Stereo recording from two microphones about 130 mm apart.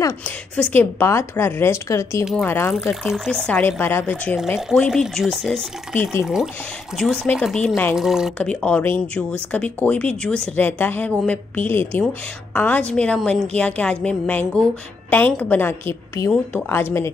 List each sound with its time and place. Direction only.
0.6 s a woman's voice: 15° left (ahead or behind)
2.7 s speech: centre (ahead or behind)
3.8 s speech: 15° left (ahead or behind)
4.8 s speech: centre (ahead or behind)
7.9 s speech: 5° right (ahead or behind)
8.4 s speech: 10° left (ahead or behind)